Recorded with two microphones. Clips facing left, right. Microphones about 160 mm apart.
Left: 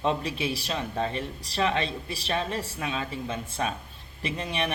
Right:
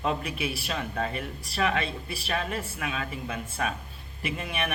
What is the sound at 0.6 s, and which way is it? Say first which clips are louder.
Speech: left 1 dB; 20° left (ahead or behind).